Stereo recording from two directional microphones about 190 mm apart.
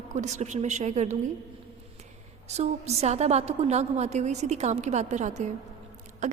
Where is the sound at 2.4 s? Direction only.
35° right (ahead or behind).